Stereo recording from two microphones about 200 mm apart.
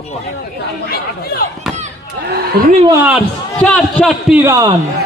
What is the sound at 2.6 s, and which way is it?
Speech, 50° right (ahead or behind).